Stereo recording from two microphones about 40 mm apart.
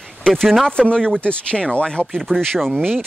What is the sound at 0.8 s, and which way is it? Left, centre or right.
Speech, left.